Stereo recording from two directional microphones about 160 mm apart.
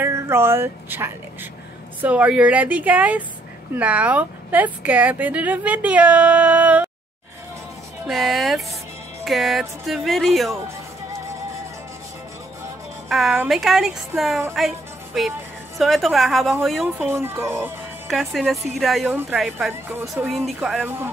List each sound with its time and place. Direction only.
0.0 s a woman's voice: 15° right (ahead or behind)
8.1 s speech: centre (ahead or behind)
13.1 s speech: 5° right (ahead or behind)
15.8 s speech: centre (ahead or behind)
17.0 s a woman's voice: 15° right (ahead or behind)
18.0 s speech: centre (ahead or behind)
19.7 s a woman's voice: 15° right (ahead or behind)
20.3 s speech: centre (ahead or behind)